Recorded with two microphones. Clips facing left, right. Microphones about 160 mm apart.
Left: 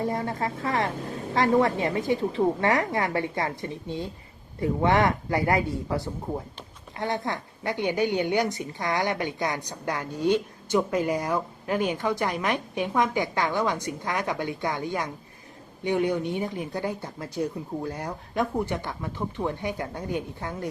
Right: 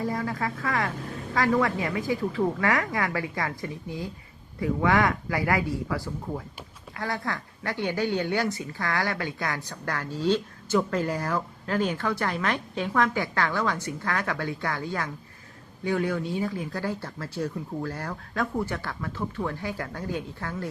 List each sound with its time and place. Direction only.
0.0 s a woman's voice: 25° left (ahead or behind)